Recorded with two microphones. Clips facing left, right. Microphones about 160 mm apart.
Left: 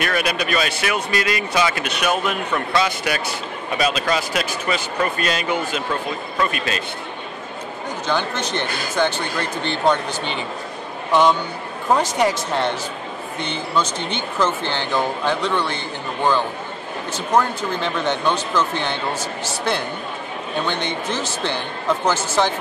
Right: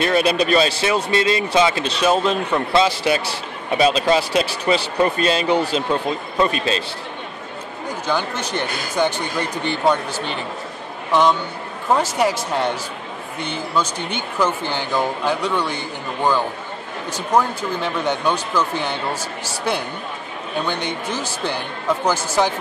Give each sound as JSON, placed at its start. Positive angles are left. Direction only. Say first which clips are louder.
{"t": 0.0, "sound": "a man's voice", "louder": "right 5 dB", "side_deg": -30}
{"t": 8.1, "sound": "a man's voice", "louder": "even", "side_deg": -10}